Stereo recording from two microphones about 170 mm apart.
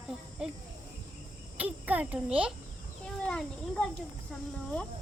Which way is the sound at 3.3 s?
5° left (ahead or behind).